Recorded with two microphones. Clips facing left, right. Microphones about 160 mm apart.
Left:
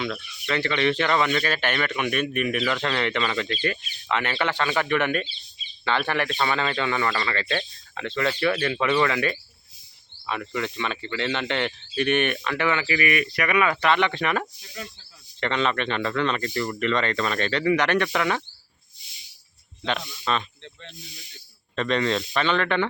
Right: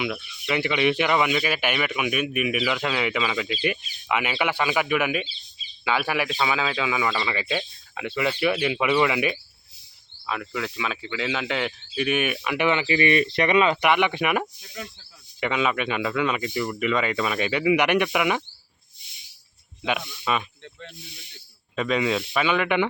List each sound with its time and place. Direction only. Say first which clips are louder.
0.0 s speech: right 1 dB; 10° right (ahead or behind)
10.2 s speech: left 1 dB; centre (ahead or behind)
12.5 s speech: right 4 dB; 20° right (ahead or behind)
19.8 s speech: right 1 dB; 10° right (ahead or behind)
21.8 s speech: even; 5° right (ahead or behind)